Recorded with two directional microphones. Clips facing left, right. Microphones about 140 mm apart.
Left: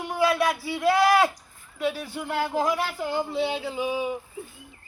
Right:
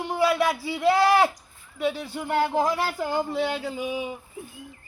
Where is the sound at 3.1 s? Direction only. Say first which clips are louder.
Left 1 dB; 45° right (ahead or behind).